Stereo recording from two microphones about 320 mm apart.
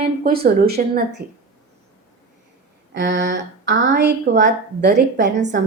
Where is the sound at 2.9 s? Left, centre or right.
Right.